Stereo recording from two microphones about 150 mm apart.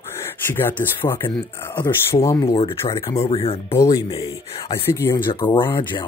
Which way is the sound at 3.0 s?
40° left (ahead or behind).